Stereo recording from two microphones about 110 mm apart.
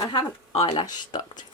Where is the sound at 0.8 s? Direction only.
40° left (ahead or behind).